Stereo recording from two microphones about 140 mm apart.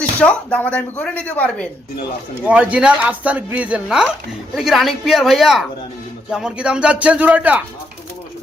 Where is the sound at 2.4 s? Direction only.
10° right (ahead or behind).